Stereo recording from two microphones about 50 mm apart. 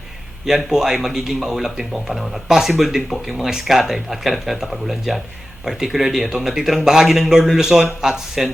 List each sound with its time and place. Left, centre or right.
0.4 s a man's voice: centre